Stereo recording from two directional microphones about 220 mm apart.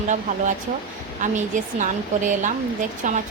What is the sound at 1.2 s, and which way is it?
A woman's voice, 35° right (ahead or behind).